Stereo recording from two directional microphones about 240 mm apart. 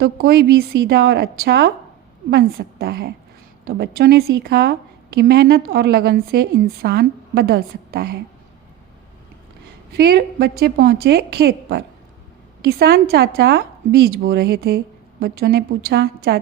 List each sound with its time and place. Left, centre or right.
0.0 s a woman's voice: right
9.9 s a woman's voice: right